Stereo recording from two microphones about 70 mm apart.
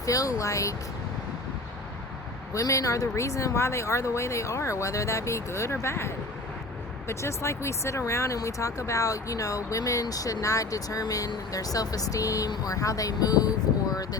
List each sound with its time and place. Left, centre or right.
0.0 s speech: left
2.5 s speech: left
13.9 s a sound: left